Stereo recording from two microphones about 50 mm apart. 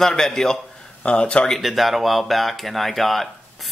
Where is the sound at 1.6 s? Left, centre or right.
Centre.